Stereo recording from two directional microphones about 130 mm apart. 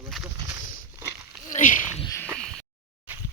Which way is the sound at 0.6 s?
90° left.